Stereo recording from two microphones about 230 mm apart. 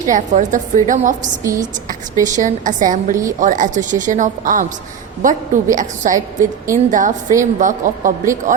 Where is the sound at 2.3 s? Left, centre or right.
Right.